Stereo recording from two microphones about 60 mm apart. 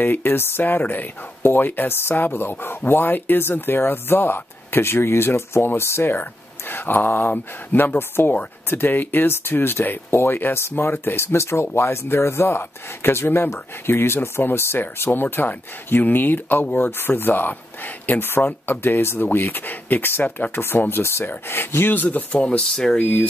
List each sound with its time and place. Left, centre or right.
0.0 s speech: left
11.3 s speech: left; by 23.0 s centre